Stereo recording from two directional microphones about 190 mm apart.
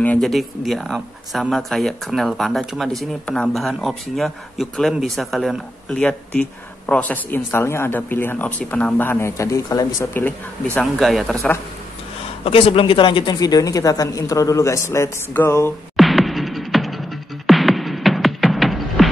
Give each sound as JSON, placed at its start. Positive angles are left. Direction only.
{"t": 0.0, "sound": "speech", "side_deg": 5}
{"t": 12.4, "sound": "speech", "side_deg": 30}
{"t": 16.0, "sound": "music", "side_deg": 0}